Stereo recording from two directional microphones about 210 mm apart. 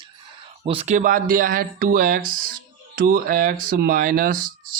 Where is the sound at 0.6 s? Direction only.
30° right (ahead or behind).